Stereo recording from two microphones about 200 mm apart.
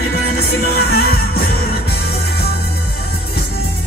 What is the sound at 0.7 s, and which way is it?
Music, 50° left (ahead or behind).